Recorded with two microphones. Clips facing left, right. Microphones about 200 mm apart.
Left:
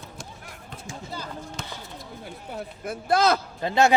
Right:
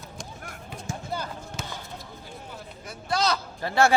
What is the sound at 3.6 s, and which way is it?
Speech, 20° left (ahead or behind).